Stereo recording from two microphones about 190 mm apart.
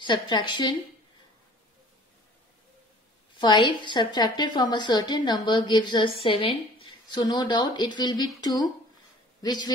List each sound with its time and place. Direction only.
0.0 s a woman's voice: 25° left (ahead or behind)
3.3 s a woman's voice: 25° left (ahead or behind)